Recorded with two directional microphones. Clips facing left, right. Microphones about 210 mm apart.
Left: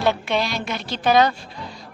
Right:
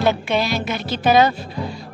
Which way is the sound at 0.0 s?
Centre (ahead or behind).